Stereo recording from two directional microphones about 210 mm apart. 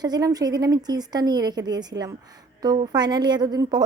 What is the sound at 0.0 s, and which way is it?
Speech, 20° right (ahead or behind).